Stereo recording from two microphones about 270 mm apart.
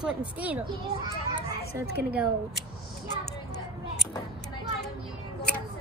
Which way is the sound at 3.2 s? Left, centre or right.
Left.